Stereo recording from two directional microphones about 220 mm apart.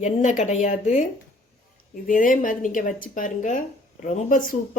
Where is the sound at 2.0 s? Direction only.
40° left (ahead or behind).